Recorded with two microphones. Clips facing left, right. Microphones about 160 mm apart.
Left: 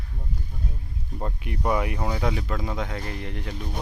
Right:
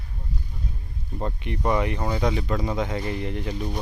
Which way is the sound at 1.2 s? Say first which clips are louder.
Right 2 dB; 5° left (ahead or behind).